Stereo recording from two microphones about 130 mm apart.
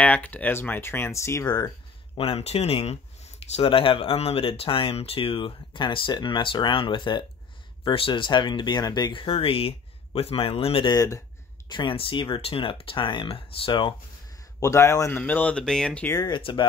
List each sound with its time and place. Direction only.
0.0 s speech: 10° left (ahead or behind)
2.1 s speech: 45° left (ahead or behind)
10.9 s speech: 25° left (ahead or behind)
11.7 s speech: 40° left (ahead or behind)
14.6 s speech: 25° left (ahead or behind)
16.2 s speech: 35° left (ahead or behind)